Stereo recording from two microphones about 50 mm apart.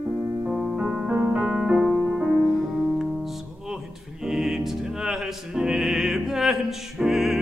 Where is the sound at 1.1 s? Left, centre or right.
Right.